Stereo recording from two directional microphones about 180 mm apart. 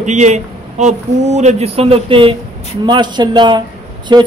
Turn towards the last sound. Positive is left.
turn(degrees=-25)  # may be behind; listen again after turning